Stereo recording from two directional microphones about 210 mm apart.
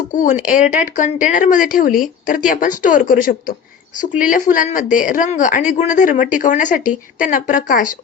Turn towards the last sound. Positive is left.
turn(degrees=40)  # may be behind; listen again after turning